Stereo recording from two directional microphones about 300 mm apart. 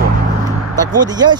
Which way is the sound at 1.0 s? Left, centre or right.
Centre.